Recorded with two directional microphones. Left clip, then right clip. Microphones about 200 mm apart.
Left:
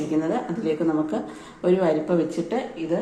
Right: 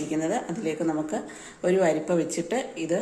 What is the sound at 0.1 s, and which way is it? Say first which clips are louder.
Speech: left 2 dB; 25° right (ahead or behind).